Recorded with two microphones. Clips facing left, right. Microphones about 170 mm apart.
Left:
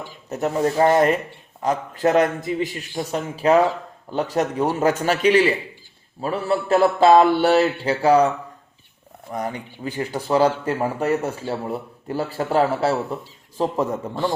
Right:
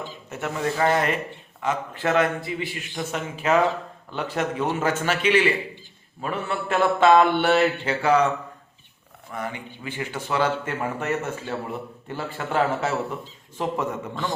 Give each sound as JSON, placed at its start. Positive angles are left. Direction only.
{"t": 0.3, "sound": "speech", "side_deg": 35}
{"t": 9.3, "sound": "speech", "side_deg": 40}